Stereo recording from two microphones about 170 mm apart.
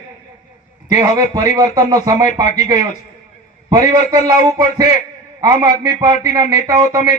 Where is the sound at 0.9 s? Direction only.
20° right (ahead or behind).